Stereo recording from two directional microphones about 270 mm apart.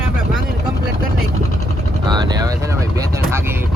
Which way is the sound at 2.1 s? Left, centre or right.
Centre.